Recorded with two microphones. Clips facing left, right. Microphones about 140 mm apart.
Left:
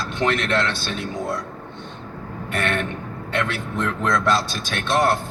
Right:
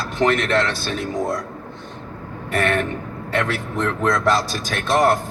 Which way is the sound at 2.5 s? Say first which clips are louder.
Right 4 dB; 40° right (ahead or behind).